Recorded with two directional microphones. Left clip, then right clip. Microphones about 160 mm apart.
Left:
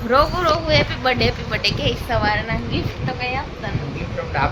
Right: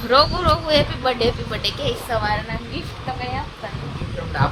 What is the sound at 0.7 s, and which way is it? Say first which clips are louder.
A woman's voice: left 1 dB; 20° right (ahead or behind).